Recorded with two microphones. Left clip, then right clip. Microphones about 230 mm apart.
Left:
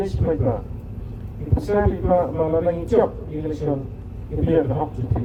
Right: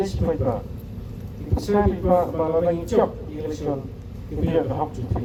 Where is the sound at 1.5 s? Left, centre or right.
Left.